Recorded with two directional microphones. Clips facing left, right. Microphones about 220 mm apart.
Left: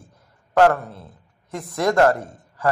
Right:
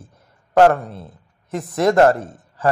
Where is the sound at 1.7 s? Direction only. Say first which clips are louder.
Right 3 dB; 25° right (ahead or behind).